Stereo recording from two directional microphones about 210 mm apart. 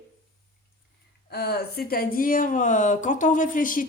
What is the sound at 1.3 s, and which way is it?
Speech, 50° left (ahead or behind).